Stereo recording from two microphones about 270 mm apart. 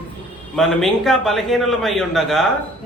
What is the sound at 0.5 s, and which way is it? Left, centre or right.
Speech, centre.